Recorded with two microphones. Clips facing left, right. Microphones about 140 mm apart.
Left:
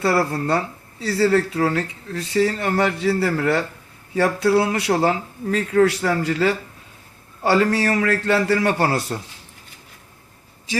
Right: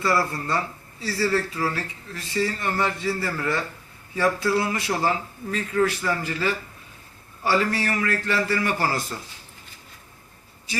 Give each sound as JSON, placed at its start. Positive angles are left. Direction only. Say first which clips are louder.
{"t": 0.0, "sound": "speech", "louder": "left 4 dB", "side_deg": 70}